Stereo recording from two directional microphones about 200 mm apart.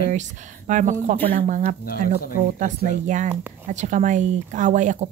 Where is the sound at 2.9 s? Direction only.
40° right (ahead or behind).